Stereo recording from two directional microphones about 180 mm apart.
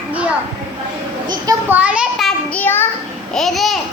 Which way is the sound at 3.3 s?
Centre (ahead or behind).